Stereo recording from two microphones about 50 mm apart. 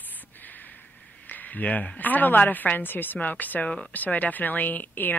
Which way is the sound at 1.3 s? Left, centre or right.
Left.